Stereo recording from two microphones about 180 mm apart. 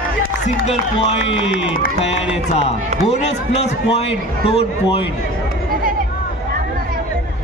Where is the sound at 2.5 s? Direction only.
35° left (ahead or behind).